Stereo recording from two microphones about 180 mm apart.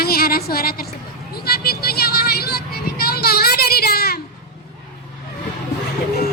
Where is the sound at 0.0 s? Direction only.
55° left (ahead or behind).